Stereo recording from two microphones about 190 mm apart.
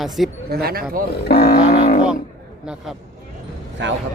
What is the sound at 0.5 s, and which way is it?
Speech, 55° right (ahead or behind).